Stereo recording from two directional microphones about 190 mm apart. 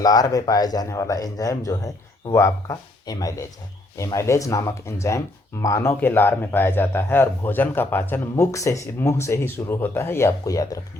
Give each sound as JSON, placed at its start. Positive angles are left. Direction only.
{"t": 0.0, "sound": "speech", "side_deg": 20}